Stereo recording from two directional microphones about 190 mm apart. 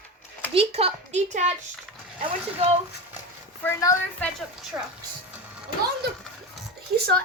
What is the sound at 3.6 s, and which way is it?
Speech, 15° left (ahead or behind).